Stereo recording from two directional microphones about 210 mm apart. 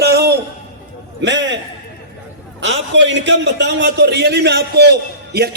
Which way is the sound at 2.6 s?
60° right (ahead or behind).